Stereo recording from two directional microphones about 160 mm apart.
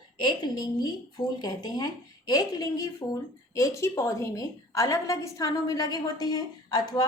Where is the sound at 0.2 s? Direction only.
30° left (ahead or behind).